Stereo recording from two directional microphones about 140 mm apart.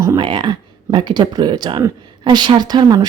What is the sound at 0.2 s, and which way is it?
Speech, 35° right (ahead or behind).